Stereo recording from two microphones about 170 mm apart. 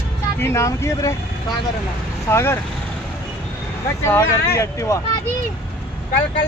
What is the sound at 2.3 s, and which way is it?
Speech, 15° left (ahead or behind).